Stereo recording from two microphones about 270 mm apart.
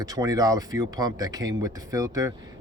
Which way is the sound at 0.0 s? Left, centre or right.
Centre.